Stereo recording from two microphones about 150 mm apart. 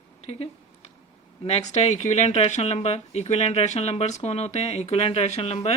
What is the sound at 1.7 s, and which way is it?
Speech, 50° left (ahead or behind).